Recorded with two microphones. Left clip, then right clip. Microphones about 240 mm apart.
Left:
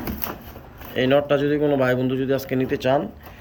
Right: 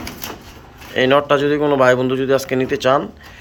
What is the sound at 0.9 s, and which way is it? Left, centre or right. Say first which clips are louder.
A man's voice: right 5 dB; centre.